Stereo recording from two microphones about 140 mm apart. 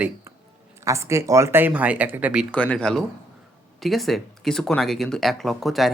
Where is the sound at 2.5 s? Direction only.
10° left (ahead or behind).